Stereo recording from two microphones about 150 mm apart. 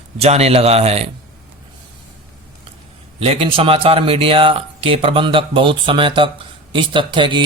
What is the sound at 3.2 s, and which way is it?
Speech, 35° right (ahead or behind).